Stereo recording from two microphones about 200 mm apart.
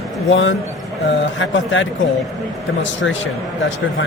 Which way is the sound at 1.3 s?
70° left (ahead or behind).